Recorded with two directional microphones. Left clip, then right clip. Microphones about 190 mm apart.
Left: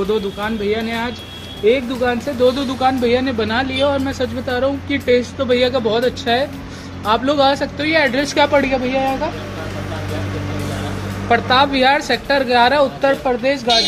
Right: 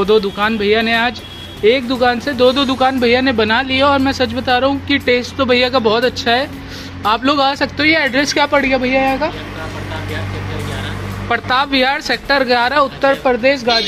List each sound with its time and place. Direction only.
0.1 s speech: 45° right (ahead or behind); by 9.3 s 30° right (ahead or behind)
11.2 s speech: 45° right (ahead or behind)